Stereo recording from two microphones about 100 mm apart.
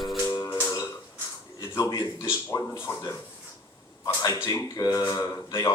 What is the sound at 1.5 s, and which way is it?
A man's voice, 40° left (ahead or behind).